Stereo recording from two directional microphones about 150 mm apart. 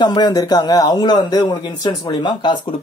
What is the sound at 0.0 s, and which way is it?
Speech, 30° left (ahead or behind).